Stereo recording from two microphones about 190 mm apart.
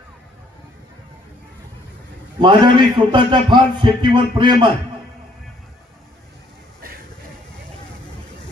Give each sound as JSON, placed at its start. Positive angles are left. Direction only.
{"t": 2.4, "sound": "a man's voice", "side_deg": -25}